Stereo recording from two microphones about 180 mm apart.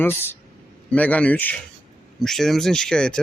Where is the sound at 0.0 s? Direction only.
10° left (ahead or behind).